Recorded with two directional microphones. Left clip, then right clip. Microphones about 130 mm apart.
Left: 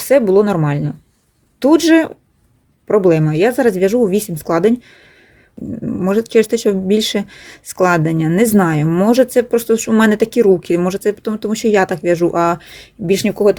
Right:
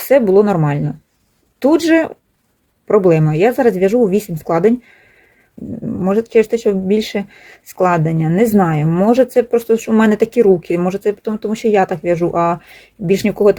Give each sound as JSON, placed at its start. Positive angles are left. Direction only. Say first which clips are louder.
{"t": 0.0, "sound": "speech", "louder": "right 1 dB", "side_deg": 25}